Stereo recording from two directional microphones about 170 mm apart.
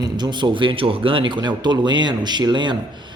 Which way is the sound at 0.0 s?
25° right (ahead or behind).